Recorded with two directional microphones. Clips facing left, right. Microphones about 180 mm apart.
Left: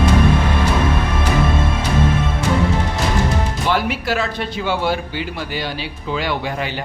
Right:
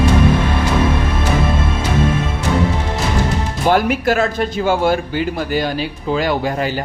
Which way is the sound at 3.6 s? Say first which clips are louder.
Right 7 dB; 50° right (ahead or behind).